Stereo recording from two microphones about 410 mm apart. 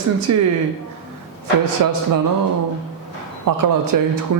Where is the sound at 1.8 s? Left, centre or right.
Right.